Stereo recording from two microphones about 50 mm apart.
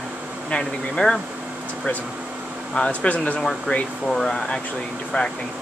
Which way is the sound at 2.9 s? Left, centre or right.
Left.